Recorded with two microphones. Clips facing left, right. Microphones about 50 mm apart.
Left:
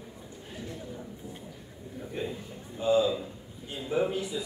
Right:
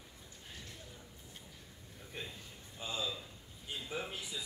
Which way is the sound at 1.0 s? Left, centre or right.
Left.